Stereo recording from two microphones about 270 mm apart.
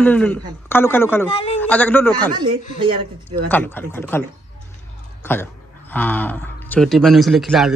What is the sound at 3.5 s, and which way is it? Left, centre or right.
Speech, centre.